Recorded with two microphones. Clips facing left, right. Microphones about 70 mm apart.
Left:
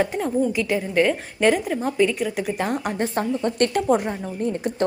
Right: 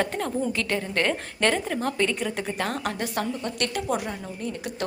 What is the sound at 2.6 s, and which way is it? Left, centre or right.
Speech, centre.